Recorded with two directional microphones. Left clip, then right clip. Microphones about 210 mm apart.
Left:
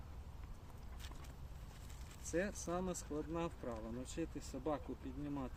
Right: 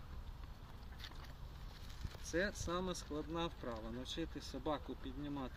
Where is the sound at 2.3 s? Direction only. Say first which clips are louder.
Right 1 dB; 20° left (ahead or behind).